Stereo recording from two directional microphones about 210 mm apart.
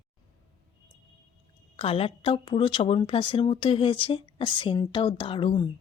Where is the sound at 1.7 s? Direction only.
25° left (ahead or behind).